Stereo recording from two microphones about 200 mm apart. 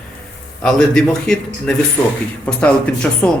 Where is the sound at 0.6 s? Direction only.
Centre (ahead or behind).